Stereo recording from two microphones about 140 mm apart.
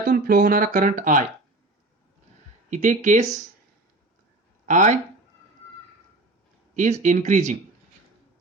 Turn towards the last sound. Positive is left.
turn(degrees=-60)  # may be behind; listen again after turning